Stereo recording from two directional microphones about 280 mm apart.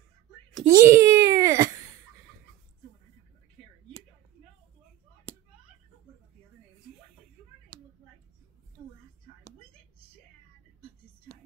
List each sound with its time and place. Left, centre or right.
0.7 s babbling: centre